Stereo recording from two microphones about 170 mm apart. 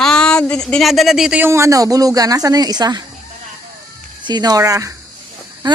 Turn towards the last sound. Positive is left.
turn(degrees=-25)  # may be behind; listen again after turning